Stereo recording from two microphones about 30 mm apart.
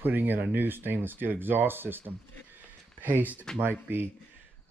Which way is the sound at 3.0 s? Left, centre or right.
Right.